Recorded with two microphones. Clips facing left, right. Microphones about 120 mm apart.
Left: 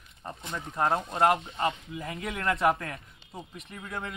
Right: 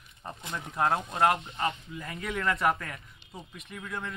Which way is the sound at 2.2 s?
5° left (ahead or behind).